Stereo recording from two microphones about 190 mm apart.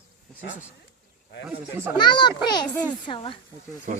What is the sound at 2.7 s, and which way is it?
Speech, 5° left (ahead or behind).